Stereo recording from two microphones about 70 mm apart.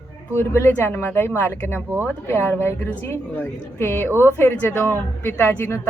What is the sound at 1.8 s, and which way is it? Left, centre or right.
Speech, right.